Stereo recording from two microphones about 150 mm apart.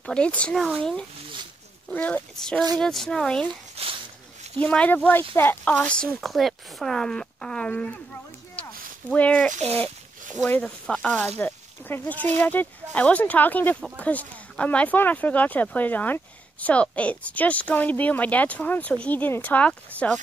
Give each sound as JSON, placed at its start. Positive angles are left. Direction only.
{"t": 0.0, "sound": "speech", "side_deg": 5}
{"t": 3.8, "sound": "speech", "side_deg": -40}
{"t": 4.6, "sound": "speech", "side_deg": 10}
{"t": 9.5, "sound": "speech", "side_deg": -45}
{"t": 10.4, "sound": "speech", "side_deg": 10}